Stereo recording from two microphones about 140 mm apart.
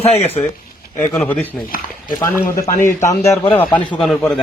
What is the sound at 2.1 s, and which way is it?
A man's voice, 25° left (ahead or behind).